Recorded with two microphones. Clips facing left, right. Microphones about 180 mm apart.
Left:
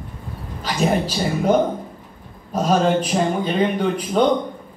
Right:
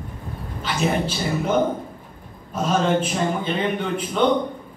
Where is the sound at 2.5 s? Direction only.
40° left (ahead or behind).